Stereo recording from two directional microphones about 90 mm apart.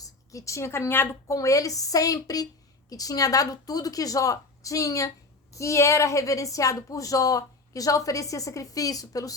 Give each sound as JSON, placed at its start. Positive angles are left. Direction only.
{"t": 0.0, "sound": "a woman's voice", "side_deg": 35}
{"t": 1.4, "sound": "a woman's voice", "side_deg": 40}